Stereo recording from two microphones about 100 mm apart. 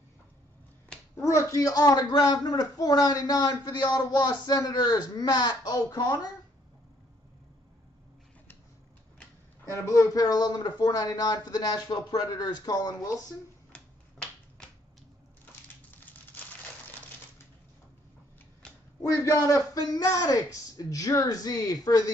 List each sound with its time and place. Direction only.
1.2 s a man's voice: 30° left (ahead or behind)
9.8 s a man's voice: 30° left (ahead or behind)
13.7 s finger snapping: 10° left (ahead or behind)
18.9 s a man's voice: 30° left (ahead or behind)